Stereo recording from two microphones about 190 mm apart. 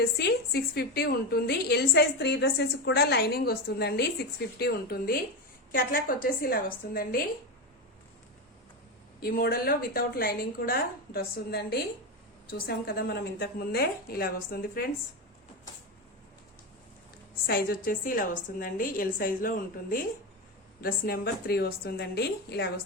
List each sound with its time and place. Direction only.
0.2 s a woman's voice: 60° left (ahead or behind)
9.2 s a woman's voice: 55° left (ahead or behind)
17.4 s a woman's voice: 50° left (ahead or behind)